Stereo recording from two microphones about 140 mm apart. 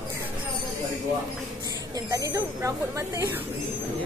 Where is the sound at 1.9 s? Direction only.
25° right (ahead or behind).